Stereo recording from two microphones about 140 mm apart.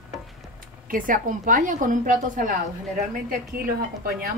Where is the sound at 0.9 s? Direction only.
75° right (ahead or behind).